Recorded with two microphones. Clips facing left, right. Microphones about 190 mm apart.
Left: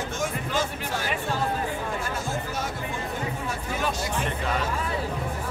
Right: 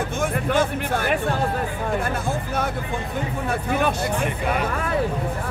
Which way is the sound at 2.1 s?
60° right (ahead or behind).